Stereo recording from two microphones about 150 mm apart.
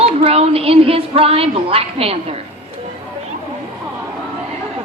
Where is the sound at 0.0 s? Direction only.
40° right (ahead or behind).